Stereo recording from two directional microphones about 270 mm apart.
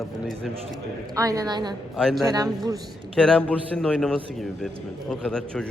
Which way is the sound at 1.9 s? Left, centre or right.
Centre.